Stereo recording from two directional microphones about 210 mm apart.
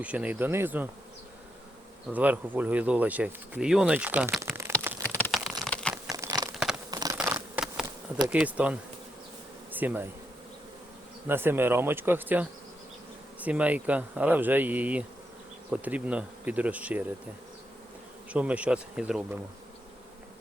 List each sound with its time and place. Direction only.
0.0 s speech: 5° right (ahead or behind)
2.0 s speech: 10° right (ahead or behind)
5.0 s a sound: 10° left (ahead or behind)
5.9 s a sound: 15° right (ahead or behind)
8.3 s speech: 5° right (ahead or behind)
11.3 s speech: 10° right (ahead or behind)
18.3 s speech: 5° right (ahead or behind)